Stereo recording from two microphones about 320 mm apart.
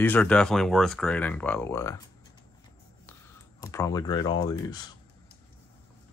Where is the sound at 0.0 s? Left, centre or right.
Centre.